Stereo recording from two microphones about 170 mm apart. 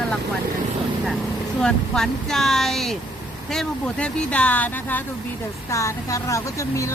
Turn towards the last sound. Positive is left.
turn(degrees=20)  # may be behind; listen again after turning